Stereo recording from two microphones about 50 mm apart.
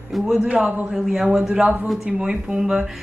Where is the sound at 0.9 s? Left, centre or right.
Centre.